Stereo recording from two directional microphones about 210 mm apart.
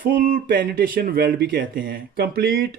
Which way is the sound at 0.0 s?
40° right (ahead or behind).